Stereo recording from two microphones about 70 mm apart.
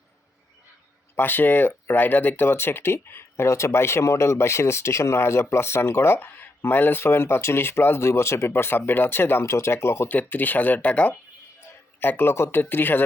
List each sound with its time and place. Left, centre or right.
1.1 s speech: left
10.2 s speech: left